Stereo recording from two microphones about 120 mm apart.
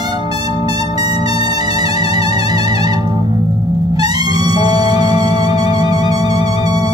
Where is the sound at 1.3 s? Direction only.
50° left (ahead or behind).